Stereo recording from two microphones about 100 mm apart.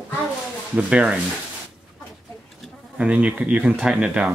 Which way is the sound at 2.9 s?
10° right (ahead or behind).